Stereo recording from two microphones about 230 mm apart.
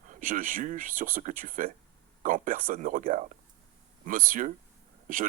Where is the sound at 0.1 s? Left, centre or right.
Right.